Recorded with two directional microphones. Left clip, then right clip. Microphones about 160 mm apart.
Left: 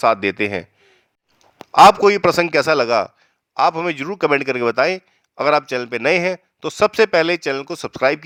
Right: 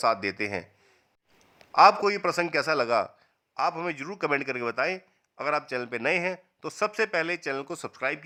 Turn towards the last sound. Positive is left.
turn(degrees=25)  # may be behind; listen again after turning